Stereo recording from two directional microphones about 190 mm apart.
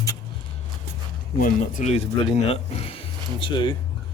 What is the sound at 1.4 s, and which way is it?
Speech, 45° left (ahead or behind).